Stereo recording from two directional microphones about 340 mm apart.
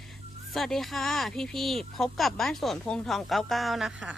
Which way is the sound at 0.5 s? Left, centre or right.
Centre.